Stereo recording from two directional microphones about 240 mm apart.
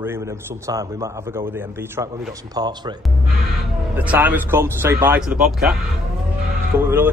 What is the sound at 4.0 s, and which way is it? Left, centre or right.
Speech, centre.